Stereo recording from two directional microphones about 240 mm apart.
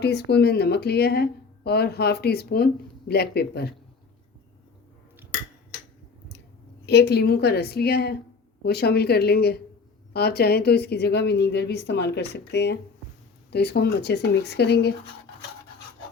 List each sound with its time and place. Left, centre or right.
0.0 s speech: left
6.8 s speech: left